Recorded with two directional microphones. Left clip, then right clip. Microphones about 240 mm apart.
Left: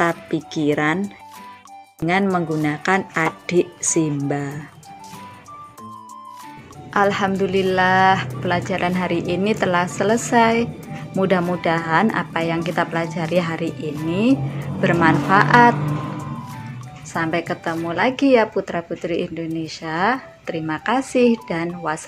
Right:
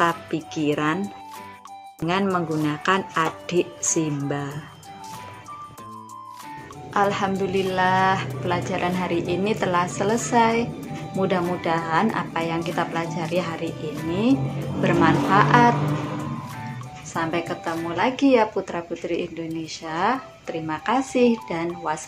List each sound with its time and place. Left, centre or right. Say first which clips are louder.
0.0 s music: left 2 dB; centre
0.6 s speech: left 4 dB; left
2.0 s speech: left 4 dB; left
6.9 s speech: left 3 dB; left
17.1 s speech: left 3 dB; left